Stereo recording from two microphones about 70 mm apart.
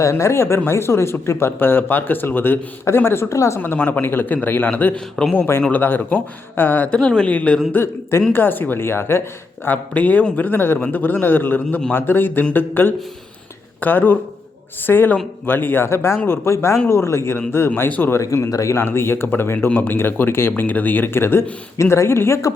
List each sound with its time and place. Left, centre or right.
0.0 s speech: left
3.8 s speech: left
5.2 s speech: centre
5.7 s speech: left
7.7 s speech: left
9.6 s speech: left
18.1 s speech: left